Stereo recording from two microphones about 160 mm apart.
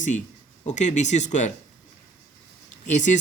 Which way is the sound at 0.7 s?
45° left (ahead or behind).